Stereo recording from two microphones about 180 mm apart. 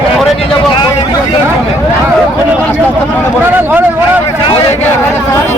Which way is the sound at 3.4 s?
10° right (ahead or behind).